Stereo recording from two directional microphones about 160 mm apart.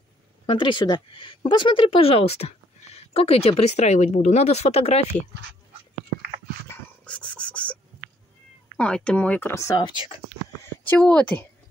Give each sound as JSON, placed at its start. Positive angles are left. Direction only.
{"t": 0.5, "sound": "speech", "side_deg": 30}
{"t": 6.7, "sound": "dog", "side_deg": 5}
{"t": 8.7, "sound": "speech", "side_deg": 5}
{"t": 10.9, "sound": "speech", "side_deg": 5}